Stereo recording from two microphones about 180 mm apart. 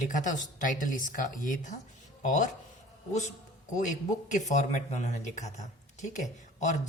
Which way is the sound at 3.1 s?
40° left (ahead or behind).